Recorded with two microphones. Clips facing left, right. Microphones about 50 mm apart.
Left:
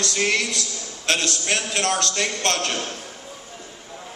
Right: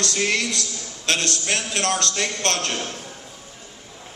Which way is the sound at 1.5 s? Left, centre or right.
Left.